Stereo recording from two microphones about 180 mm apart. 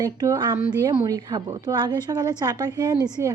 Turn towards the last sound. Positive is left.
turn(degrees=-15)  # may be behind; listen again after turning